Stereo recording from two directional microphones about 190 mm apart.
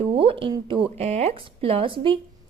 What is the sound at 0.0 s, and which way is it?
A woman's voice, 30° right (ahead or behind).